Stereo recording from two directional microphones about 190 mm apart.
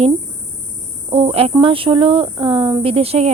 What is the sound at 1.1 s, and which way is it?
Speech, 30° right (ahead or behind).